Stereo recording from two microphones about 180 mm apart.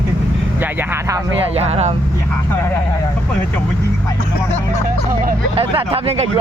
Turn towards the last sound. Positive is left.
turn(degrees=-35)  # may be behind; listen again after turning